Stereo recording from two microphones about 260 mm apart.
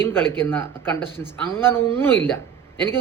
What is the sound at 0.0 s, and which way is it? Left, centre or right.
Speech, centre.